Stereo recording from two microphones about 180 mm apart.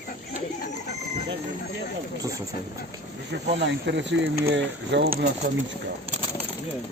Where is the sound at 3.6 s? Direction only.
80° right.